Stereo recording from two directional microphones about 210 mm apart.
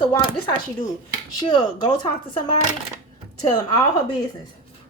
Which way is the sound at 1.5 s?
20° left (ahead or behind).